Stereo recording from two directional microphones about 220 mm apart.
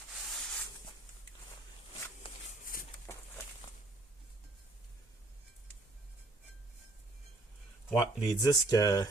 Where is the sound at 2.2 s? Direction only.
25° left (ahead or behind).